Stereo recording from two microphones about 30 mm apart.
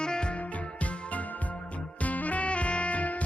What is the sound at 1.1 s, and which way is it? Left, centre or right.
Music, left.